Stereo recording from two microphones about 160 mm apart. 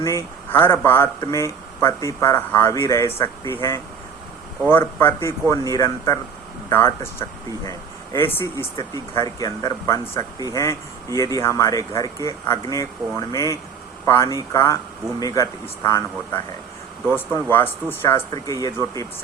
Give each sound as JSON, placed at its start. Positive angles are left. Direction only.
{"t": 0.5, "sound": "speech", "side_deg": 15}
{"t": 17.5, "sound": "speech", "side_deg": 15}